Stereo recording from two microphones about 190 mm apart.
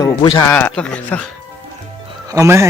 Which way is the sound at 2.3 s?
15° right (ahead or behind).